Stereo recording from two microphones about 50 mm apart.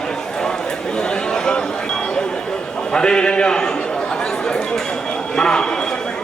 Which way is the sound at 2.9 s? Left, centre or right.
Centre.